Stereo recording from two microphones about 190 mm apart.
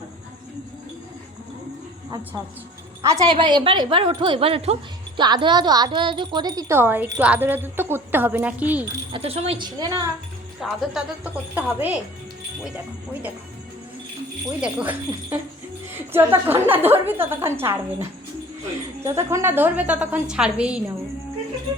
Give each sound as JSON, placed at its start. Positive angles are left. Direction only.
{"t": 3.0, "sound": "a woman's voice", "side_deg": -15}
{"t": 9.1, "sound": "a woman's voice", "side_deg": -30}
{"t": 10.6, "sound": "speech", "side_deg": -5}
{"t": 14.6, "sound": "a woman's voice", "side_deg": -5}